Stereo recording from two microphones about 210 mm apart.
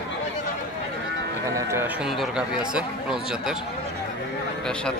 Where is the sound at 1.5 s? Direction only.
10° right (ahead or behind).